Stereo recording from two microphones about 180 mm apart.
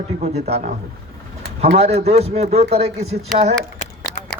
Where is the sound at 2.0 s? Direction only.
35° right (ahead or behind).